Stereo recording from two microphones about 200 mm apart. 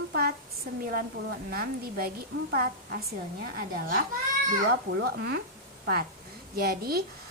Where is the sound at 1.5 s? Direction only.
50° right (ahead or behind).